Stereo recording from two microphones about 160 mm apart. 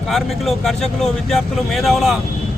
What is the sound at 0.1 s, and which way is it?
Speech, centre (ahead or behind).